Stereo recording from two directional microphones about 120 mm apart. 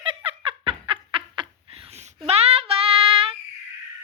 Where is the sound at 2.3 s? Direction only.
55° right (ahead or behind).